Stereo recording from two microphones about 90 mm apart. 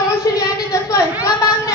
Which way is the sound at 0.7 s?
40° left (ahead or behind).